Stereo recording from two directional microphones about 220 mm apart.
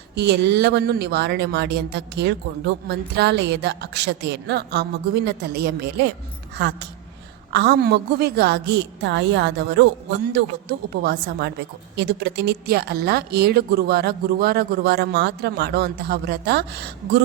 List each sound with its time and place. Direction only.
0.2 s speech: 50° right (ahead or behind)